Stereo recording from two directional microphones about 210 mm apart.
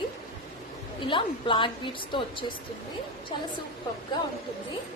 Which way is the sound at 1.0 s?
25° left (ahead or behind).